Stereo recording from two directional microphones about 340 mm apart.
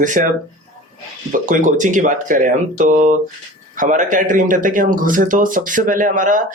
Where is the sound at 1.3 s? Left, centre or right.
Right.